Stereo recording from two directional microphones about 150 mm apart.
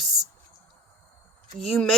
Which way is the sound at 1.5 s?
Centre (ahead or behind).